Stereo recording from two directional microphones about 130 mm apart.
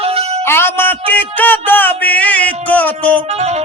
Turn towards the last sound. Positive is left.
turn(degrees=10)  # may be behind; listen again after turning